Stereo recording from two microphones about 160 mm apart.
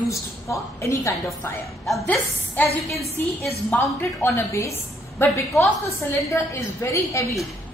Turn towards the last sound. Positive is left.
turn(degrees=15)  # may be behind; listen again after turning